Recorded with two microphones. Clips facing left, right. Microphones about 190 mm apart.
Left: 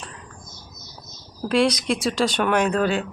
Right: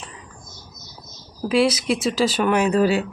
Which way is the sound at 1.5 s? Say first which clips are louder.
Right 1 dB; 5° right (ahead or behind).